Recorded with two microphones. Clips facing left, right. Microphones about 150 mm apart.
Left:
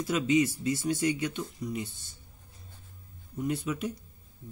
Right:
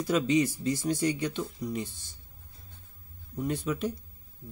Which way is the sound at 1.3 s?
5° left (ahead or behind).